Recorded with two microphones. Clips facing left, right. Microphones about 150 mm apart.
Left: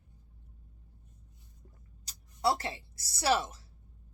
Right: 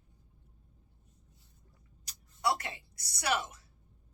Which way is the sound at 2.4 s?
30° left (ahead or behind).